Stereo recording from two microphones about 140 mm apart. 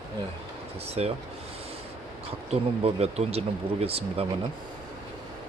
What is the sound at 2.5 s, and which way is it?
Speech, 45° right (ahead or behind).